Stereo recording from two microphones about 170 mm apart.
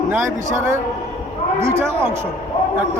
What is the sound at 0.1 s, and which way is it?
Speech, 15° right (ahead or behind).